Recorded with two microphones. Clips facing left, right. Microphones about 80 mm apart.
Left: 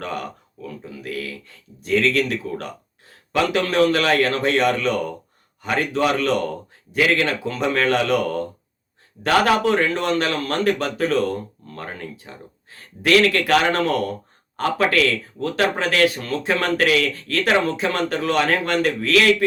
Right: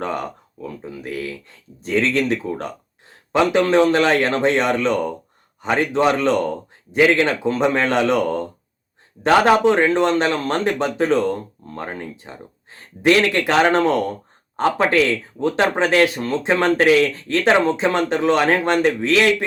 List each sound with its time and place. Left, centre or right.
0.0 s speech: right